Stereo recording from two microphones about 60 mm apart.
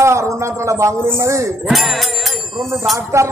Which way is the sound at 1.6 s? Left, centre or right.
Centre.